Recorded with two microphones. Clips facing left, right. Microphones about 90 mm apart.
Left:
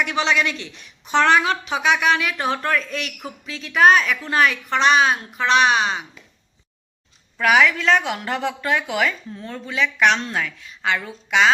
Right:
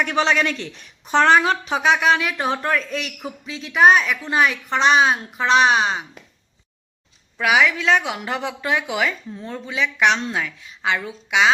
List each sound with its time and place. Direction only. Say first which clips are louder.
0.0 s a woman's voice: right 1 dB; 40° right (ahead or behind)
7.3 s a woman's voice: left 1 dB; 10° right (ahead or behind)